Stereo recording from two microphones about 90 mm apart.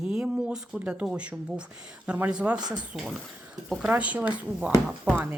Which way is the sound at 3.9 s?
15° right (ahead or behind).